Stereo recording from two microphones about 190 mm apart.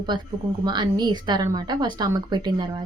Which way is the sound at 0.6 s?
25° right (ahead or behind).